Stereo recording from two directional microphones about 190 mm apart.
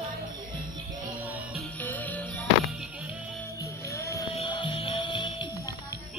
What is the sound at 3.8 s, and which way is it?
Music, 15° left (ahead or behind).